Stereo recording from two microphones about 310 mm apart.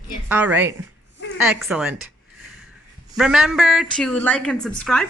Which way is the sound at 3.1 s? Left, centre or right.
Centre.